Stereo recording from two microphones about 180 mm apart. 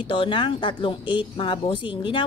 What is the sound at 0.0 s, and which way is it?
Speech, 30° left (ahead or behind).